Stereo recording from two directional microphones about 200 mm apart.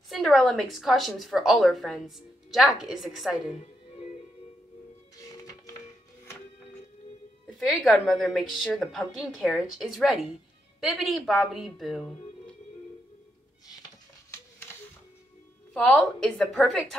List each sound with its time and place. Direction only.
0.1 s a woman's voice: centre (ahead or behind)
5.3 s music: 15° left (ahead or behind)
7.4 s a woman's voice: centre (ahead or behind)
15.7 s a woman's voice: 5° left (ahead or behind)